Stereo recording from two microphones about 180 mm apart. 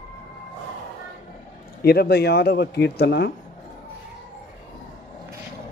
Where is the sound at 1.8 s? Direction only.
60° left (ahead or behind).